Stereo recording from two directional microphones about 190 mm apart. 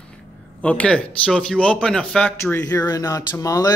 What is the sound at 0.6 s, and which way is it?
A man's voice, 5° left (ahead or behind).